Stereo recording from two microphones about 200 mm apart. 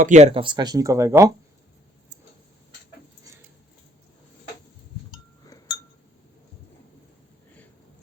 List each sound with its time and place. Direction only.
0.0 s speech: 35° right (ahead or behind); by 1.3 s 15° right (ahead or behind)
5.1 s cowbell: 20° left (ahead or behind)